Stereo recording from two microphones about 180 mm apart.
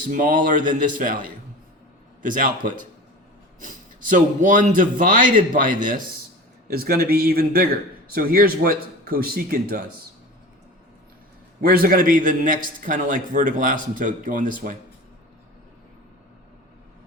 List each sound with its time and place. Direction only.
0.1 s a man's voice: 50° right (ahead or behind)
2.2 s a man's voice: 50° right (ahead or behind)
11.6 s a man's voice: 55° right (ahead or behind)